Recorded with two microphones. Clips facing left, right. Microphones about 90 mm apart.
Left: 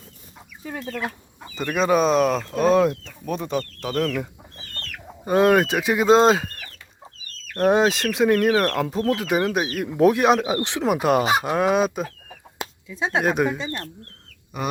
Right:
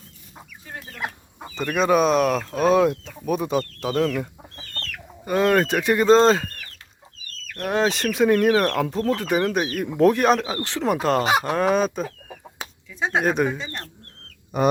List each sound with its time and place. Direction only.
1.5 s speech: centre (ahead or behind)
5.2 s speech: 20° left (ahead or behind)
5.6 s speech: 5° left (ahead or behind)
7.9 s speech: centre (ahead or behind)
10.5 s speech: 15° left (ahead or behind)
13.2 s speech: centre (ahead or behind)
14.5 s speech: 35° right (ahead or behind)